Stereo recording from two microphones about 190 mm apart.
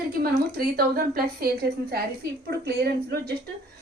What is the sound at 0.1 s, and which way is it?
A woman's voice, 50° right (ahead or behind).